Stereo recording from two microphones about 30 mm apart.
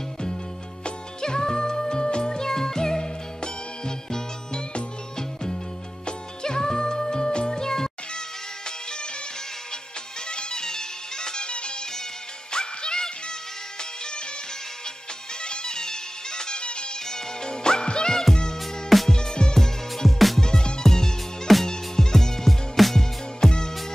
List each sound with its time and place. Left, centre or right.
1.2 s music: left
8.6 s music: left
10.3 s music: left
15.4 s music: left
18.6 s music: centre
19.0 s music: left
20.1 s music: centre
20.3 s music: centre
22.8 s music: centre
23.4 s music: centre